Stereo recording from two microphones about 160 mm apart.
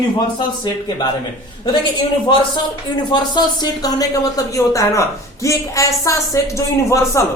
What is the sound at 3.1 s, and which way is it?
A man's voice, 25° left (ahead or behind).